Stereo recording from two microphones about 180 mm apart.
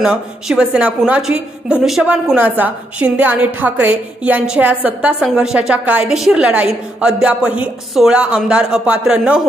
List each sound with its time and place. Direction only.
0.0 s a woman's voice: 5° right (ahead or behind)